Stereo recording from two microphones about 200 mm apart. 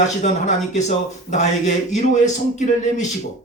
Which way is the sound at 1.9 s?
35° left (ahead or behind).